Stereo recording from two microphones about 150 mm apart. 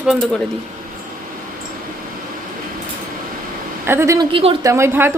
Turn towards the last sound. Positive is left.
turn(degrees=-15)  # may be behind; listen again after turning